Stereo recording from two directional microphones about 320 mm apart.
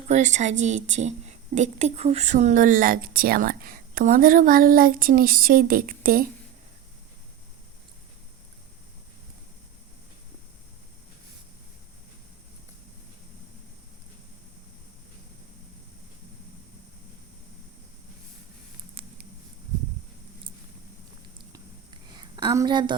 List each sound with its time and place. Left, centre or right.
0.1 s a woman's voice: right
19.0 s patter: centre
21.3 s a sound: centre